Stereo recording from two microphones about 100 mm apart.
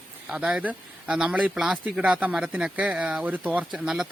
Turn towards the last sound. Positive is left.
turn(degrees=-5)  # may be behind; listen again after turning